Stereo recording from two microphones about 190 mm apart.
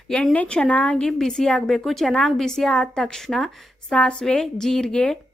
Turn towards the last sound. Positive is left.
turn(degrees=5)  # may be behind; listen again after turning